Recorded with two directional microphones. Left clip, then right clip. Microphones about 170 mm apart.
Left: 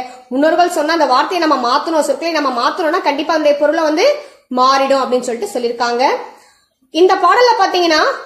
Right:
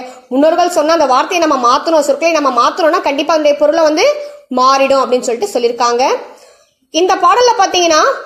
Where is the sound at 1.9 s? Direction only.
50° right (ahead or behind).